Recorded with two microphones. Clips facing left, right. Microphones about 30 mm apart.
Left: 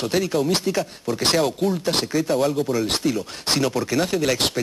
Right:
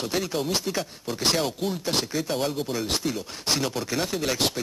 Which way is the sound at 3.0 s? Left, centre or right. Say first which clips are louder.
Left 5 dB; centre.